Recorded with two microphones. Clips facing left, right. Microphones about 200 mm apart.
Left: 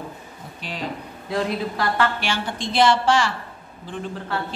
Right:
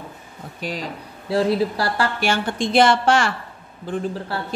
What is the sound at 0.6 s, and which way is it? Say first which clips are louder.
Speech: right 2 dB; 40° right (ahead or behind).